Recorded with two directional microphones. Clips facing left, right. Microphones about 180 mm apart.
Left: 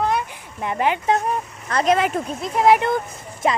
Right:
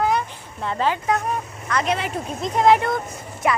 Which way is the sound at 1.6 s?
35° left (ahead or behind).